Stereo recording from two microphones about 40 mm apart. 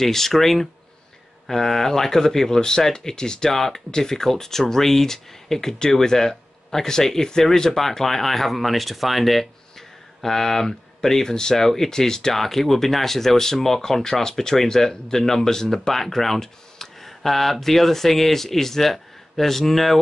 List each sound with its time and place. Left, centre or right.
0.0 s speech: centre